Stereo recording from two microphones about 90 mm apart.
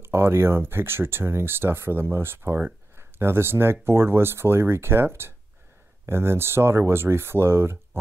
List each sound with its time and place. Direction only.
0.0 s speech: 25° right (ahead or behind)